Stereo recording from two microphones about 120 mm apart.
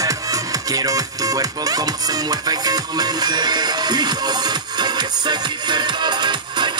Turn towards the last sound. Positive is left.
turn(degrees=-40)  # may be behind; listen again after turning